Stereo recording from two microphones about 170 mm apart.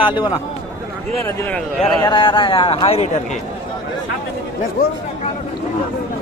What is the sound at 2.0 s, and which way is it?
A man's voice, 30° left (ahead or behind).